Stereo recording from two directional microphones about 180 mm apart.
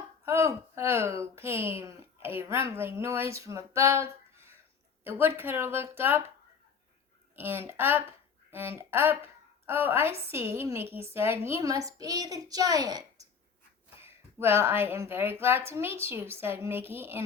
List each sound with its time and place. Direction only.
0.3 s a woman's voice: 15° right (ahead or behind)
7.3 s a woman's voice: 10° right (ahead or behind)